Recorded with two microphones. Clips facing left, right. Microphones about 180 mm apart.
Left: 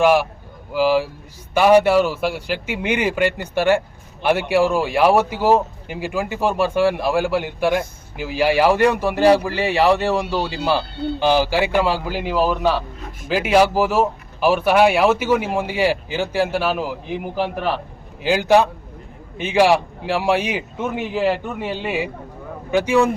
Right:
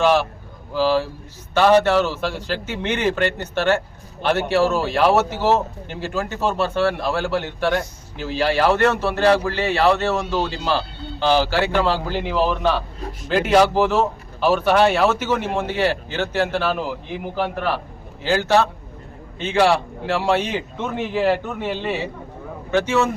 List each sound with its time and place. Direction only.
0.0 s speech: 10° left (ahead or behind)
18.2 s speech: 15° left (ahead or behind)
21.6 s speech: 10° left (ahead or behind)